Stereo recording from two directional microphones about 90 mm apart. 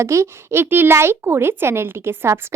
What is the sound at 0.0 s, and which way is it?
Speech, 30° right (ahead or behind).